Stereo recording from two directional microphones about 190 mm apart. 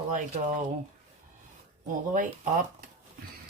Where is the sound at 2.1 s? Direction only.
45° right (ahead or behind).